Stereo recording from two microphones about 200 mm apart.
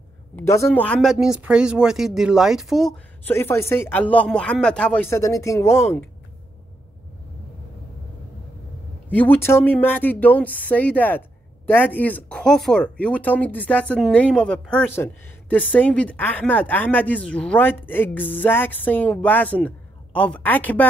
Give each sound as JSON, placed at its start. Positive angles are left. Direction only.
{"t": 0.4, "sound": "speech", "side_deg": 10}
{"t": 9.1, "sound": "speech", "side_deg": 10}